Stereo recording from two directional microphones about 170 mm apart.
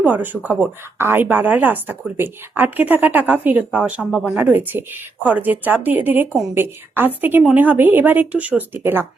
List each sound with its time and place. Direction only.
0.0 s a woman's voice: 10° right (ahead or behind)